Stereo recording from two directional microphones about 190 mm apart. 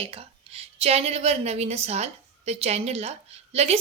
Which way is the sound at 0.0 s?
30° right (ahead or behind).